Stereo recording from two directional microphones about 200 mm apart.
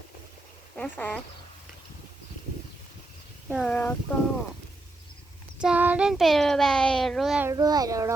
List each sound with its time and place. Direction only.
0.8 s speech: 5° left (ahead or behind)
3.5 s speech: centre (ahead or behind)
5.5 s speech: 5° right (ahead or behind)
7.4 s a child's voice: 20° right (ahead or behind)